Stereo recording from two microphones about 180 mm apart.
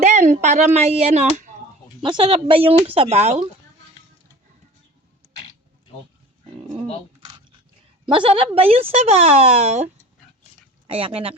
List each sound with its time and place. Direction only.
0.0 s speech: 40° right (ahead or behind)
2.0 s speech: 30° right (ahead or behind)
8.0 s speech: 30° right (ahead or behind)